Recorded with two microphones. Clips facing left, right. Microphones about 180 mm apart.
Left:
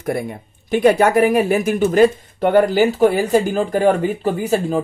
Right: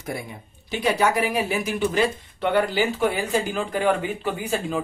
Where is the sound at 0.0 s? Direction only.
55° left (ahead or behind).